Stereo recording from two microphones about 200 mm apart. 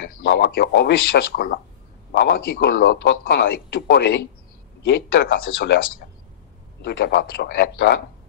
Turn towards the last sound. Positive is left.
turn(degrees=55)  # may be behind; listen again after turning